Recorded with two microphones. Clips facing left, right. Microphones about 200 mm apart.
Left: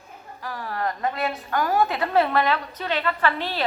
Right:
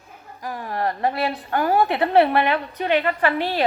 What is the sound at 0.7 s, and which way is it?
A woman's voice, 35° right (ahead or behind).